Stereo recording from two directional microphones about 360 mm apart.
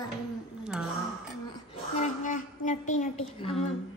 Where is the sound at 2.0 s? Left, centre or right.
Left.